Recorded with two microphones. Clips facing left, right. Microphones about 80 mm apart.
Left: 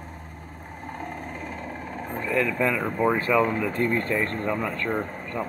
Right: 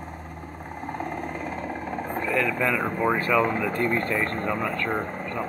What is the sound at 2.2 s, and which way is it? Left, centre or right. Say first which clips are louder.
Speech: left 1 dB; centre.